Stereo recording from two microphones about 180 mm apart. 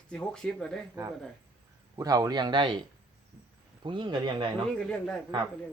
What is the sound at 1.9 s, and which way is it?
Speech, 20° right (ahead or behind).